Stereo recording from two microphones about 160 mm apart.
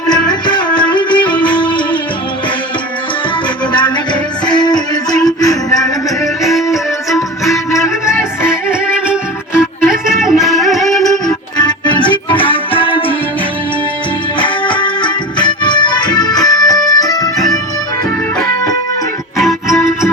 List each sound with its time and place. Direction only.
0.1 s music: 25° left (ahead or behind)
3.7 s music: 30° left (ahead or behind)
5.7 s music: centre (ahead or behind)
8.0 s music: 15° left (ahead or behind)
9.6 s music: 5° right (ahead or behind)
11.3 s music: 25° left (ahead or behind)
14.3 s music: 30° left (ahead or behind)
19.4 s music: centre (ahead or behind)